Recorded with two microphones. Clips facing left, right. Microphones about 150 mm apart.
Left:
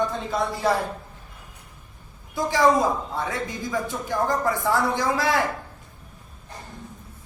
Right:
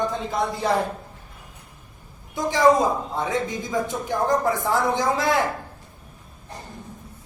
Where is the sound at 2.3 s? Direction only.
20° right (ahead or behind).